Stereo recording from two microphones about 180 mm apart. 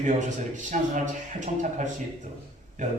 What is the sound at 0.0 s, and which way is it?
A man's voice, 45° right (ahead or behind).